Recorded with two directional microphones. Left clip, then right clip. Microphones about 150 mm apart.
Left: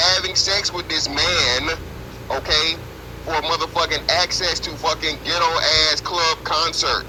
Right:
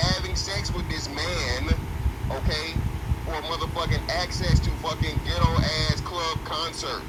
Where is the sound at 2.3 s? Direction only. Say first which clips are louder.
Left 11 dB; 50° left (ahead or behind).